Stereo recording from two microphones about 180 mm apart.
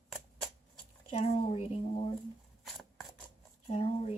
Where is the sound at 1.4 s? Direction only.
35° left (ahead or behind).